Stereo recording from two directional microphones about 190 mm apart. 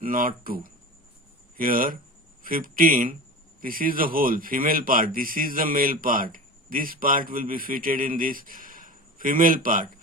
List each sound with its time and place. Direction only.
0.0 s speech: 45° right (ahead or behind)